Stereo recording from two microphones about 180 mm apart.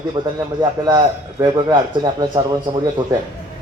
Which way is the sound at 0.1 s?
20° right (ahead or behind).